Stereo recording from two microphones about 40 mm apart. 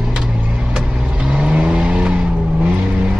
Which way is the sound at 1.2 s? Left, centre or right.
Right.